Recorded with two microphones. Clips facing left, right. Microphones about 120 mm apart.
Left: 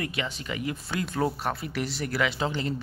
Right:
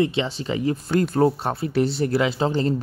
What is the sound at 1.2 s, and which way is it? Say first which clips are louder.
Speech: right 8 dB; 30° right (ahead or behind).